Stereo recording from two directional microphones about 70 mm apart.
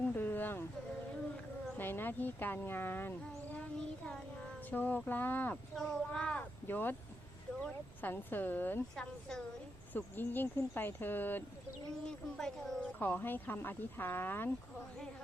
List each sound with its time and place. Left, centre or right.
0.1 s a sound: left
1.8 s speech: left
3.8 s child singing: centre
4.7 s speech: left
5.7 s speech: centre
6.7 s speech: left
9.9 s speech: left
12.0 s speech: centre
13.0 s speech: left